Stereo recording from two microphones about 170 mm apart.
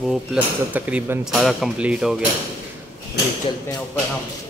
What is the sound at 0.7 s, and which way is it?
Speech, 10° right (ahead or behind).